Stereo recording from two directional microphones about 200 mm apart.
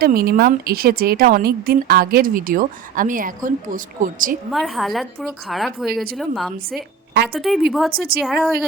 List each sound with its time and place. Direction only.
0.0 s speech: 50° right (ahead or behind)
4.5 s a woman's voice: centre (ahead or behind)
7.9 s speech: 50° right (ahead or behind)
8.2 s a woman's voice: centre (ahead or behind)